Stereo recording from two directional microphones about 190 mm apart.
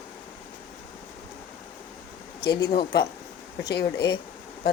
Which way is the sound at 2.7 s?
50° left (ahead or behind).